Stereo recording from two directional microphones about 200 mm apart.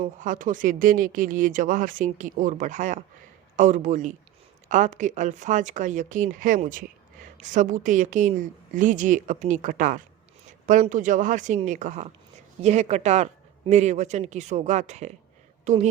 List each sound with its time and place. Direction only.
0.0 s speech: 40° right (ahead or behind)